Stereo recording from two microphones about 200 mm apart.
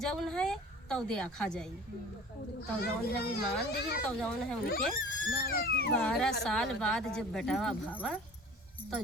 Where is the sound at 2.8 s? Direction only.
55° left (ahead or behind).